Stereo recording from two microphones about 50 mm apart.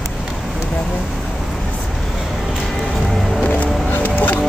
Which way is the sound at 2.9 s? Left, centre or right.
Centre.